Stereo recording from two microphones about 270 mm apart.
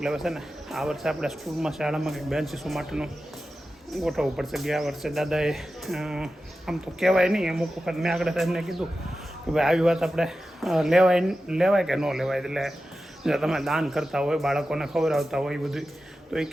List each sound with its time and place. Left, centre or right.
0.0 s speech: centre